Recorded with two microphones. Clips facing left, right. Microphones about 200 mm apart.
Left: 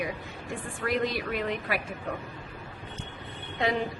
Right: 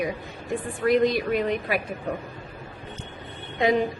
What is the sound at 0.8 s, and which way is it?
Speech, 15° right (ahead or behind).